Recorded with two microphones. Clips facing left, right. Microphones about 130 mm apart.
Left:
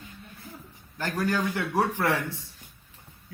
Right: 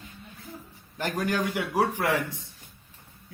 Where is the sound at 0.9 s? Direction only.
15° right (ahead or behind).